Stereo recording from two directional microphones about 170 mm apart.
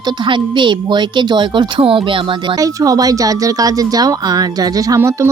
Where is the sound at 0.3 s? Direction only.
30° right (ahead or behind).